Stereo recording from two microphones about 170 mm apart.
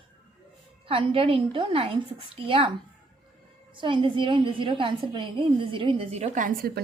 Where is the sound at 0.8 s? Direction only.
35° right (ahead or behind).